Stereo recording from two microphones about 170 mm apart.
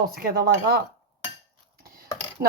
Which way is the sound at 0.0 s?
65° right (ahead or behind).